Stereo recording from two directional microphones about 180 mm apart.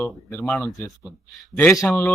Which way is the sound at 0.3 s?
10° left (ahead or behind).